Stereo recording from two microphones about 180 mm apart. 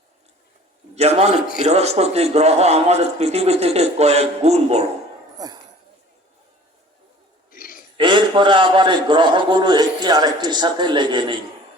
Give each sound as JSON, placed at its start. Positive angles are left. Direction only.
{"t": 0.9, "sound": "a man's voice", "side_deg": -35}
{"t": 5.4, "sound": "speech", "side_deg": -20}
{"t": 7.5, "sound": "a sound", "side_deg": 50}
{"t": 7.9, "sound": "a man's voice", "side_deg": -25}